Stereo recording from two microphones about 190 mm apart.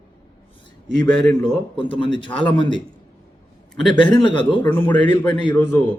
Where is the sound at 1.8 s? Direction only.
25° left (ahead or behind).